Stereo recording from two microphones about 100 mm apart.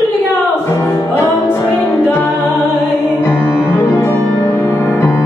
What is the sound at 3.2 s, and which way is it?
Music, 20° left (ahead or behind).